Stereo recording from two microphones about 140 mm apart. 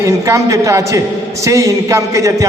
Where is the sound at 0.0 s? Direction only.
20° right (ahead or behind).